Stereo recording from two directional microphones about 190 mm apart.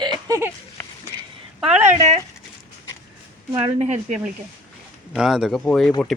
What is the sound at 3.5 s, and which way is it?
Speech, 35° right (ahead or behind).